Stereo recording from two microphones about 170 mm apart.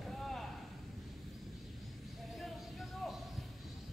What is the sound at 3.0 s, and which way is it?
Music, centre (ahead or behind).